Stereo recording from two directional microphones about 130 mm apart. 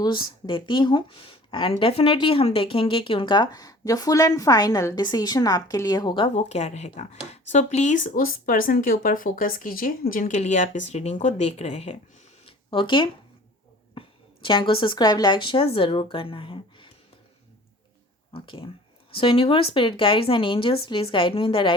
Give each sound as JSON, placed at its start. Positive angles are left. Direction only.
{"t": 0.0, "sound": "speech", "side_deg": 35}
{"t": 6.2, "sound": "speech", "side_deg": 60}
{"t": 12.5, "sound": "a sound", "side_deg": 40}
{"t": 14.4, "sound": "speech", "side_deg": 40}
{"t": 18.3, "sound": "speech", "side_deg": 45}